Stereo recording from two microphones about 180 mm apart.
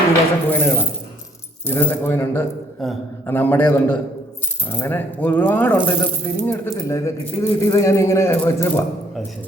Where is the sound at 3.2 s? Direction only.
10° left (ahead or behind).